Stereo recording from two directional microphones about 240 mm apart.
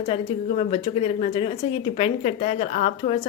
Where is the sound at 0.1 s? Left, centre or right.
Left.